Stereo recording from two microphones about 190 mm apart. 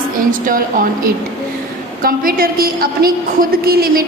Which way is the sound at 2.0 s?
50° right (ahead or behind).